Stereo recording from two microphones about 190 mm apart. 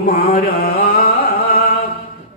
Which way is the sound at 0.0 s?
45° left (ahead or behind).